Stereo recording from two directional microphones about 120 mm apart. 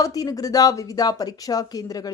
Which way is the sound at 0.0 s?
30° left (ahead or behind).